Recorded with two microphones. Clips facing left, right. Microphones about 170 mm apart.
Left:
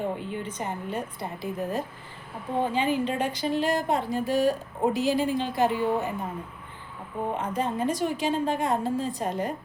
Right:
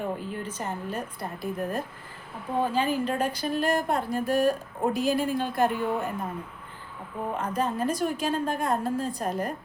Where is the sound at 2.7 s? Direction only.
20° left (ahead or behind).